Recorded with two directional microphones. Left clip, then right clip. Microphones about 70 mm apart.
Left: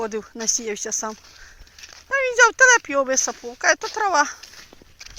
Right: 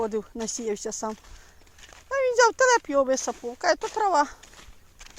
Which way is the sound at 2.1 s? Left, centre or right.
Right.